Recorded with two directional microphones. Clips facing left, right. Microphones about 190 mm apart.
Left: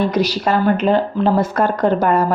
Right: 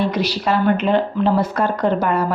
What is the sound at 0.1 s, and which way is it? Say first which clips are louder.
Speech: left 3 dB; 40° left (ahead or behind).